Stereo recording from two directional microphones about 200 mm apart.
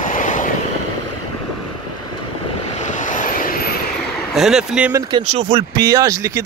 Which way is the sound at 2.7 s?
35° left (ahead or behind).